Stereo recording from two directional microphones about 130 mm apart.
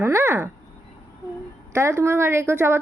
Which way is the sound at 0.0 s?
20° right (ahead or behind).